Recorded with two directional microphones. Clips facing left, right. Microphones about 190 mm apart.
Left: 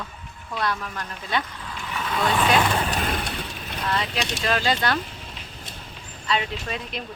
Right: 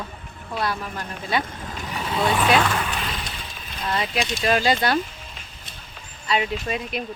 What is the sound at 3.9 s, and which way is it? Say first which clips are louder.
Speech: right 3 dB; 10° right (ahead or behind).